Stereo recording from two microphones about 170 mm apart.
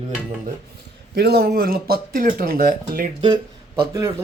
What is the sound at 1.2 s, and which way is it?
Speech, 70° right (ahead or behind).